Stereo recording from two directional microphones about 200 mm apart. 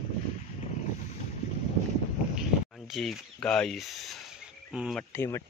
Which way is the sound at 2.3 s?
Centre (ahead or behind).